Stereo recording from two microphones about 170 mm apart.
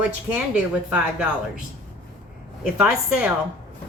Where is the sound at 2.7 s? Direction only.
5° right (ahead or behind).